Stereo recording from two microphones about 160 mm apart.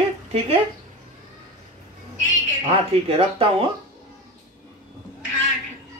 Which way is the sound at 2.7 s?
35° right (ahead or behind).